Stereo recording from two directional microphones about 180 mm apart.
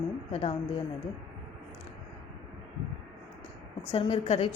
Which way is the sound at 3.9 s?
30° left (ahead or behind).